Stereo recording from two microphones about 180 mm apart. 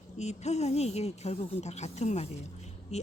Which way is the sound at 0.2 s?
40° left (ahead or behind).